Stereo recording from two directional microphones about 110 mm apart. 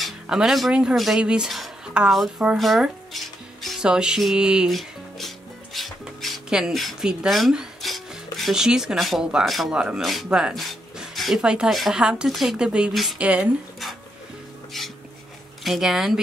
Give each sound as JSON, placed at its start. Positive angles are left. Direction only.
{"t": 0.0, "sound": "speech", "side_deg": -5}
{"t": 14.7, "sound": "a sound", "side_deg": 5}
{"t": 15.6, "sound": "speech", "side_deg": 0}